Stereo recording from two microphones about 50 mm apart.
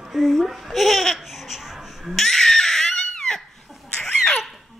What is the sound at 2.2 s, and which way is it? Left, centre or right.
Crying, centre.